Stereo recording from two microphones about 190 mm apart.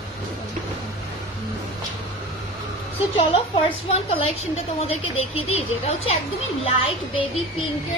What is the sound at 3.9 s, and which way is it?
Speech, 30° left (ahead or behind).